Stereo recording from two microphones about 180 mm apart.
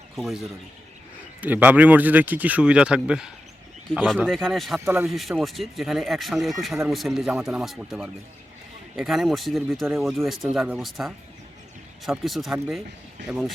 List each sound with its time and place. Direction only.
0.2 s speech: centre (ahead or behind)